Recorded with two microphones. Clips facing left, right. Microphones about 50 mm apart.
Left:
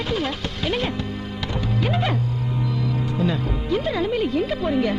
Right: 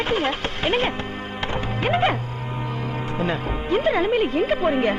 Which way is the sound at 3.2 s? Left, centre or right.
Right.